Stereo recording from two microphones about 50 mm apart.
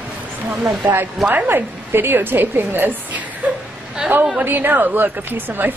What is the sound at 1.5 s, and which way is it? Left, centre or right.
A woman's voice, right.